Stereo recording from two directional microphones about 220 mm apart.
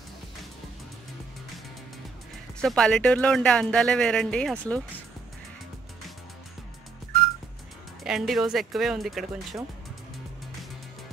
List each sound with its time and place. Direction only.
2.6 s speech: 5° left (ahead or behind)
8.0 s speech: centre (ahead or behind)